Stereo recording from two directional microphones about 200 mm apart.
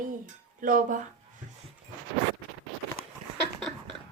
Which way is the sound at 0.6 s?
40° right (ahead or behind).